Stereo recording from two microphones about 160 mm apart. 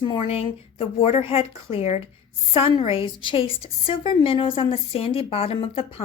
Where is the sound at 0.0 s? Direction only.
30° left (ahead or behind).